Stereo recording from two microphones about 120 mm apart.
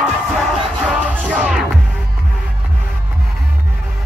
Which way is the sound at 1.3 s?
10° right (ahead or behind).